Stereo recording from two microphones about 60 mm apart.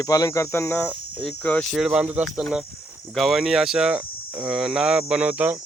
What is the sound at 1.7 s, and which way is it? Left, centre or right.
Speech, centre.